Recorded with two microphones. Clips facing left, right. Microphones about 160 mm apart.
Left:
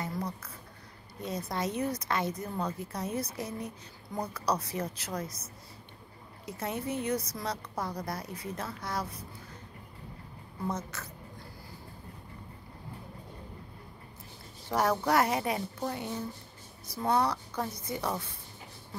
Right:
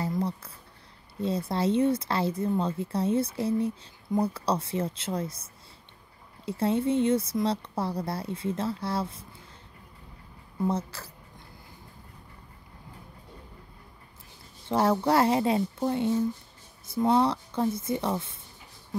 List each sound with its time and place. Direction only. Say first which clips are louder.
0.0 s a sound: right 6 dB; 30° right (ahead or behind)
1.2 s speech: right 7 dB; 30° right (ahead or behind)
10.7 s speech: right 2 dB; 30° right (ahead or behind)
14.7 s speech: right 4 dB; 25° right (ahead or behind)